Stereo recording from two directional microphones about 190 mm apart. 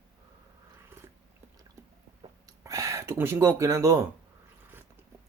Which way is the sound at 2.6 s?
15° right (ahead or behind).